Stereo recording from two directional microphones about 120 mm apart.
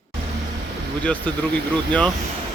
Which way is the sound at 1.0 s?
10° left (ahead or behind).